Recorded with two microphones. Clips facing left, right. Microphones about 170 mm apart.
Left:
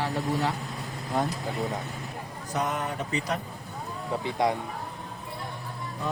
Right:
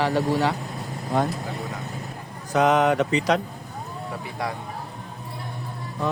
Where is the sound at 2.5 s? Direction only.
90° right.